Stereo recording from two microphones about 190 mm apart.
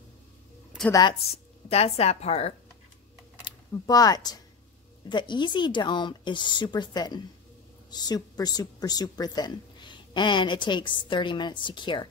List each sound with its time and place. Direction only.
1.7 s speech: 35° left (ahead or behind)
3.7 s a woman's voice: 20° left (ahead or behind)